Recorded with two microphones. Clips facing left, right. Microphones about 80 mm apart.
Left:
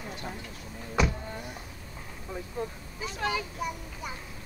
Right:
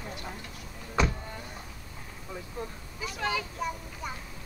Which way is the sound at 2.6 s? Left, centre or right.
Left.